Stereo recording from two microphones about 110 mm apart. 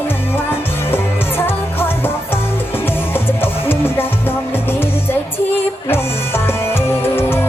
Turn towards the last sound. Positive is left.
turn(degrees=20)  # may be behind; listen again after turning